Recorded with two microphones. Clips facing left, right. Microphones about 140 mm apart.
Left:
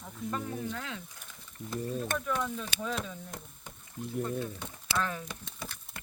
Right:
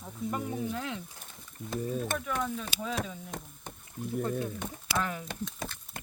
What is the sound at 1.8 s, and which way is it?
Speech, centre (ahead or behind).